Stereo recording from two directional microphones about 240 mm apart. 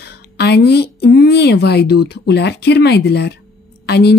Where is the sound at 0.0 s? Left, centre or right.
Left.